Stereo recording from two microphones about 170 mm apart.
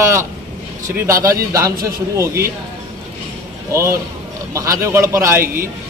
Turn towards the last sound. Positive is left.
turn(degrees=-15)  # may be behind; listen again after turning